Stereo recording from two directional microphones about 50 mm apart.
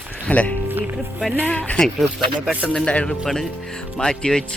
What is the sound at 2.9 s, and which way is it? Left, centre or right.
Speech, left.